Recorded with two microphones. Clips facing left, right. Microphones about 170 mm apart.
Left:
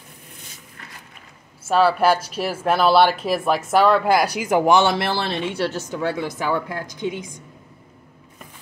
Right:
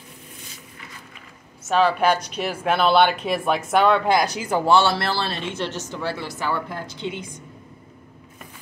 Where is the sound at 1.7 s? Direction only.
5° left (ahead or behind).